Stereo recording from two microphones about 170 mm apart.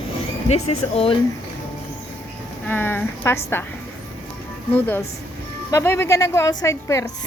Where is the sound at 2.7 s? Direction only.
10° left (ahead or behind).